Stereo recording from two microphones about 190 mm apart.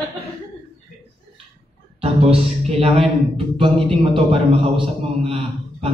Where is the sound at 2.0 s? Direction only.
30° right (ahead or behind).